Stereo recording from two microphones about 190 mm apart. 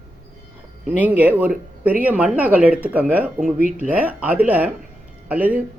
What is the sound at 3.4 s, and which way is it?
Speech, 45° right (ahead or behind).